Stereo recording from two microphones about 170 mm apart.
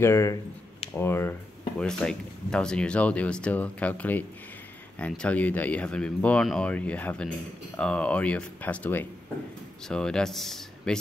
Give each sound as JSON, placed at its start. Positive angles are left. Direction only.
{"t": 0.0, "sound": "speech", "side_deg": 15}